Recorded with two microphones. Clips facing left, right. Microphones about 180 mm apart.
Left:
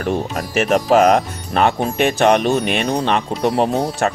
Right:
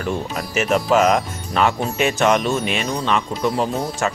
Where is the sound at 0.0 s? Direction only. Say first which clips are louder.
Left 3 dB; 50° left (ahead or behind).